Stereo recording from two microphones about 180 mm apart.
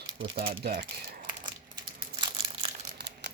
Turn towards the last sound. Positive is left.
turn(degrees=-70)  # may be behind; listen again after turning